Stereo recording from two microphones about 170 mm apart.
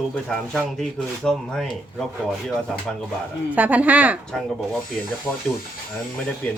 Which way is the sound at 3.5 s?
10° right (ahead or behind).